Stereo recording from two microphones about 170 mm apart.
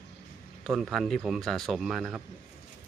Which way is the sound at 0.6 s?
Centre (ahead or behind).